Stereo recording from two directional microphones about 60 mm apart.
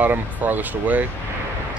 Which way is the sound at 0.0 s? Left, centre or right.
Right.